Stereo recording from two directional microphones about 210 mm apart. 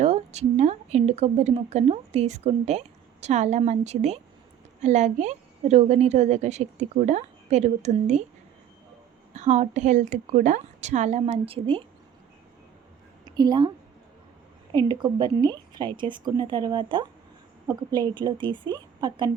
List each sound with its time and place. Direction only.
0.0 s speech: 30° right (ahead or behind)
9.3 s speech: 35° right (ahead or behind)
13.2 s a woman's voice: 20° right (ahead or behind)
14.7 s speech: 20° right (ahead or behind)